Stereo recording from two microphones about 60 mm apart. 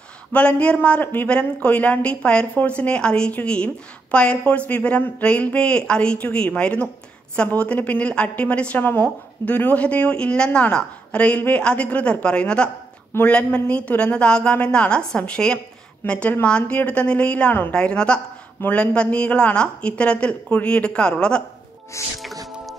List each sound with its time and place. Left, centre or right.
0.3 s a woman's voice: left
1.3 s a woman's voice: centre
8.7 s a woman's voice: left; by 17.5 s centre
17.5 s a woman's voice: left
17.7 s a woman's voice: centre
22.0 s speech: left